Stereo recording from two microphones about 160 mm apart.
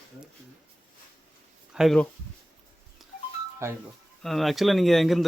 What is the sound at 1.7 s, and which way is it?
Speech, 5° right (ahead or behind).